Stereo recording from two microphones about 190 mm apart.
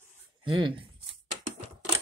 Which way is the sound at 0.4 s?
25° right (ahead or behind).